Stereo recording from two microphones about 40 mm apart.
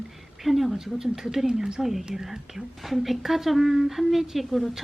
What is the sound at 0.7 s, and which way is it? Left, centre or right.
Speech, centre.